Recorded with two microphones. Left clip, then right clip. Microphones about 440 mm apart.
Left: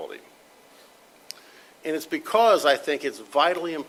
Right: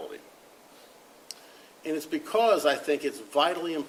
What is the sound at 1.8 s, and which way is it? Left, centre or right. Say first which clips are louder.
Speech: left 3 dB; left.